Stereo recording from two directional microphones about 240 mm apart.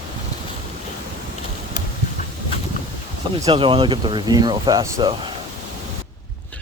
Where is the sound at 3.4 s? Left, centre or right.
Centre.